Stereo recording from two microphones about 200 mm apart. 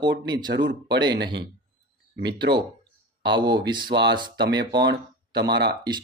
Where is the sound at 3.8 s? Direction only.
60° right (ahead or behind).